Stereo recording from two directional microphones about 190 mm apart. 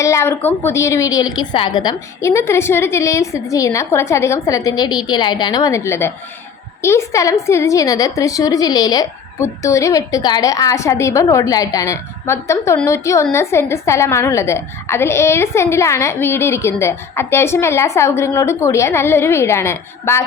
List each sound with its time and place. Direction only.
0.0 s a woman's voice: 15° left (ahead or behind)